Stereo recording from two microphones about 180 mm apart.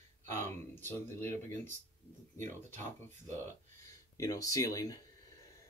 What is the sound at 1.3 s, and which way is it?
Speech, 40° right (ahead or behind).